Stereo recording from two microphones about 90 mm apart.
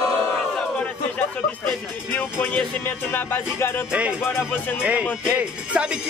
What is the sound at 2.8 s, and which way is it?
Speech, 25° left (ahead or behind).